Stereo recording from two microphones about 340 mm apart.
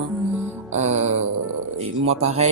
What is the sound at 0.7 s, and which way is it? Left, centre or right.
Speech, right.